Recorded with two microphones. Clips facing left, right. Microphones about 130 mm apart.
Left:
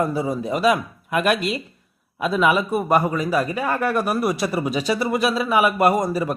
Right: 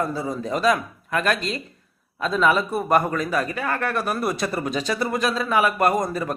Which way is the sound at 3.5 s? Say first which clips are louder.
Left 3 dB; 25° left (ahead or behind).